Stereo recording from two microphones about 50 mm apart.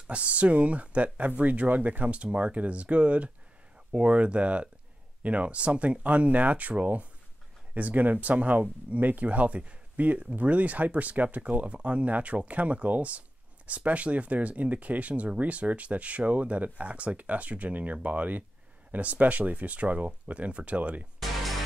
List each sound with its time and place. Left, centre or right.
0.0 s speech: right
21.2 s music: centre